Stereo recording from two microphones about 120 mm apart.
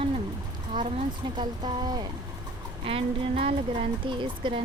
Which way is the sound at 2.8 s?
50° right (ahead or behind).